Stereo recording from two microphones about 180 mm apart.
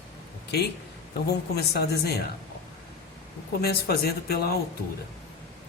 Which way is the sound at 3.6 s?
60° left (ahead or behind).